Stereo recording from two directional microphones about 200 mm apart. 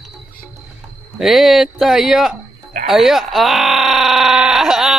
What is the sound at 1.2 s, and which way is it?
Speech, centre (ahead or behind).